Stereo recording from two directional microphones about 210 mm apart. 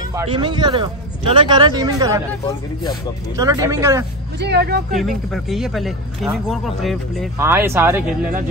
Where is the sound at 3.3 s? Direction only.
15° right (ahead or behind).